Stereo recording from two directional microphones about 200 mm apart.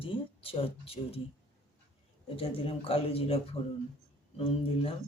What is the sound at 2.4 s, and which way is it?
Speech, 30° left (ahead or behind).